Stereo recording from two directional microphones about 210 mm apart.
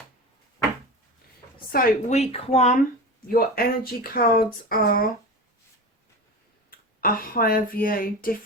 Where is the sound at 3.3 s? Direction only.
45° left (ahead or behind).